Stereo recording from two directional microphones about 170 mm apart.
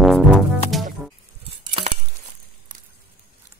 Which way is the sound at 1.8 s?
30° right (ahead or behind).